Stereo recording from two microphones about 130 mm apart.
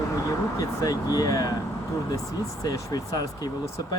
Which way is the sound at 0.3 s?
25° left (ahead or behind).